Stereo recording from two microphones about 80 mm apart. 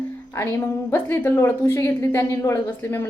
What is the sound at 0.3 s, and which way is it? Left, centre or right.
A woman's voice, left.